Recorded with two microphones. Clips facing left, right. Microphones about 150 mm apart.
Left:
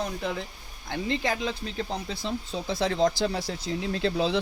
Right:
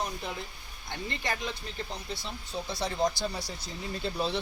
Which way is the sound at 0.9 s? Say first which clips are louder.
Left 7 dB; 90° left.